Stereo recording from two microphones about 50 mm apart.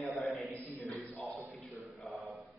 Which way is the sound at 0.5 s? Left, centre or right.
Left.